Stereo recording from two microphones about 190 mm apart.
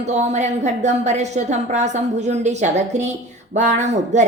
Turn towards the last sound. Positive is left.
turn(degrees=-35)  # may be behind; listen again after turning